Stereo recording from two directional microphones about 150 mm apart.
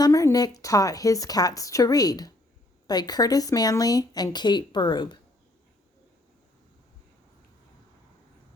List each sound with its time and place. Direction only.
0.0 s speech: 20° left (ahead or behind)